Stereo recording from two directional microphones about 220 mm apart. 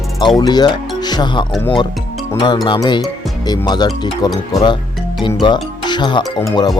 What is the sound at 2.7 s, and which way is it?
Speech, 20° left (ahead or behind).